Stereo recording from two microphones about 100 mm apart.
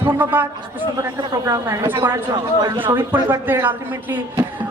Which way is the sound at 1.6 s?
30° right (ahead or behind).